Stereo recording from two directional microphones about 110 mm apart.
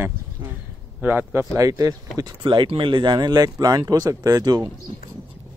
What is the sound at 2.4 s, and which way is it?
Speech, 50° right (ahead or behind).